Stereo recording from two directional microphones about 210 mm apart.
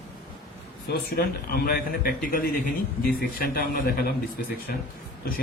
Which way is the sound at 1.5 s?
45° left (ahead or behind).